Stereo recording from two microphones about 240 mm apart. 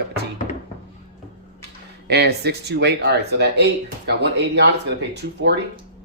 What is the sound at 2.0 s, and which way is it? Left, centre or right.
Speech, right.